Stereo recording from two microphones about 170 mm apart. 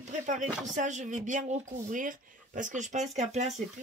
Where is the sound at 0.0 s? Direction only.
45° right (ahead or behind).